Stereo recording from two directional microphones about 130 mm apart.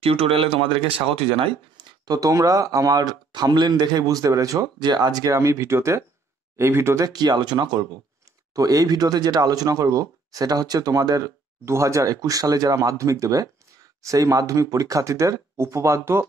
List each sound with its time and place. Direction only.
0.0 s speech: 45° right (ahead or behind); by 16.3 s 20° right (ahead or behind)